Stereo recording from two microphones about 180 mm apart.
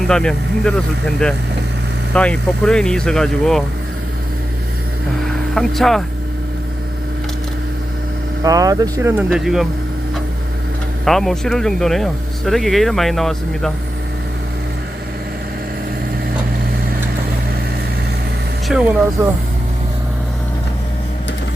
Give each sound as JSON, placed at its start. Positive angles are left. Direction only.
{"t": 0.1, "sound": "speech", "side_deg": 5}
{"t": 5.2, "sound": "music", "side_deg": 0}
{"t": 8.4, "sound": "speech", "side_deg": -20}
{"t": 9.3, "sound": "speech", "side_deg": 0}
{"t": 11.0, "sound": "speech", "side_deg": 0}
{"t": 18.7, "sound": "speech", "side_deg": -5}
{"t": 19.2, "sound": "speech", "side_deg": -20}